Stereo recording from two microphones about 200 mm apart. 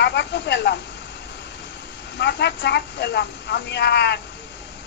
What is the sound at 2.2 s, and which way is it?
A woman's voice, 60° left (ahead or behind).